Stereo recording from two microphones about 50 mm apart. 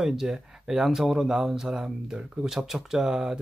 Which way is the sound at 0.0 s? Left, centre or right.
Centre.